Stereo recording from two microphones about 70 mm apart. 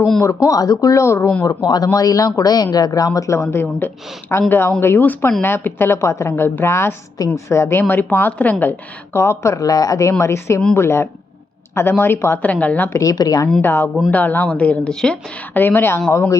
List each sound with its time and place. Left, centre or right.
0.2 s a woman's voice: left
1.5 s speech: left
1.9 s speech: left
3.2 s a woman's voice: left
6.3 s a woman's voice: left
12.4 s a woman's voice: left
13.0 s speech: left
13.6 s a woman's voice: left; by 15.2 s centre
15.5 s a woman's voice: left